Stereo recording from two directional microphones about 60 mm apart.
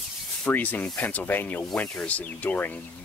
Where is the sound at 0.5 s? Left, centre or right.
Left.